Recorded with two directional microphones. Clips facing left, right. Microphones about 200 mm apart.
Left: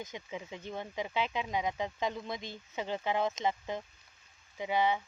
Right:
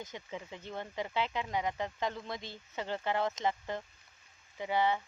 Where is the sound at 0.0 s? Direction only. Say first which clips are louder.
Left 1 dB; 15° left (ahead or behind).